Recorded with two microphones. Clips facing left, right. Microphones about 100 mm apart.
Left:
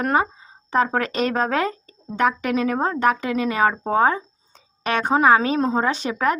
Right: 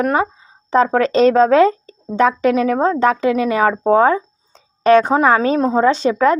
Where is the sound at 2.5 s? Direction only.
25° left (ahead or behind).